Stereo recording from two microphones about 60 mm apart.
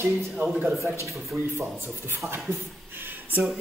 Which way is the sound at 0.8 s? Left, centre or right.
Right.